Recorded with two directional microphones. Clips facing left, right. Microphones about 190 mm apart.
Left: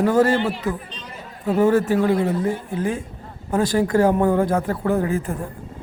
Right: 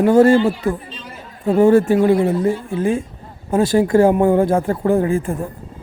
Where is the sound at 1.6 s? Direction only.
25° right (ahead or behind).